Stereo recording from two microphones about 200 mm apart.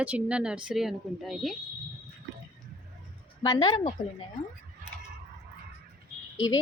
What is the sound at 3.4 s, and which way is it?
Speech, 20° left (ahead or behind).